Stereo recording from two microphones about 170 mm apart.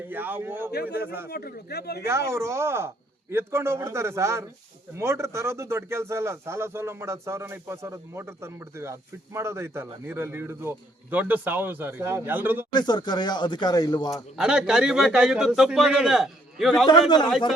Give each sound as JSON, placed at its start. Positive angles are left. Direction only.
{"t": 0.1, "sound": "speech", "side_deg": -10}
{"t": 0.7, "sound": "speech", "side_deg": 70}
{"t": 2.0, "sound": "speech", "side_deg": -15}
{"t": 12.7, "sound": "speech", "side_deg": 25}
{"t": 14.3, "sound": "a man's voice", "side_deg": -5}